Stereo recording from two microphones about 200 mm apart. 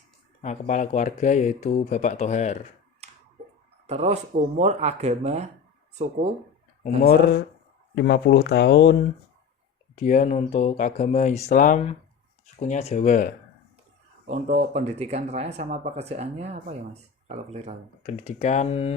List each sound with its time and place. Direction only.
0.4 s speech: 35° left (ahead or behind)
3.0 s finger snapping: 30° right (ahead or behind)
3.8 s speech: 35° right (ahead or behind)
7.0 s speech: 50° left (ahead or behind)
9.9 s speech: 35° left (ahead or behind)
14.3 s speech: 35° right (ahead or behind)
18.0 s speech: 35° left (ahead or behind)